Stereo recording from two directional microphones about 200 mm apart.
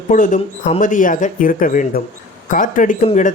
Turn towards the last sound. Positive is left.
turn(degrees=40)  # may be behind; listen again after turning